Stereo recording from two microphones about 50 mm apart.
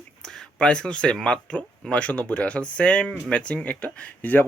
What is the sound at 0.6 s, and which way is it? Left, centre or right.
Speech, left.